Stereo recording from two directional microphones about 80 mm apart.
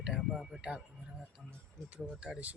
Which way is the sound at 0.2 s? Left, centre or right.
Centre.